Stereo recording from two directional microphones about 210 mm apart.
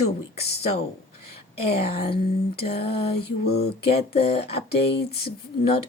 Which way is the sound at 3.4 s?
50° left (ahead or behind).